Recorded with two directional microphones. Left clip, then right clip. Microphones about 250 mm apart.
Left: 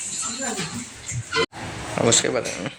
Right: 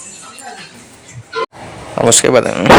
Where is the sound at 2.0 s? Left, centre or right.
Right.